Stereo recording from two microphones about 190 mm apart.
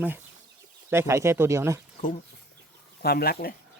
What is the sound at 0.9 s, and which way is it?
Speech, 15° right (ahead or behind).